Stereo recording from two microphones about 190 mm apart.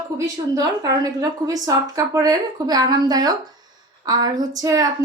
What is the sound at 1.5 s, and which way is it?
A woman's voice, 15° right (ahead or behind).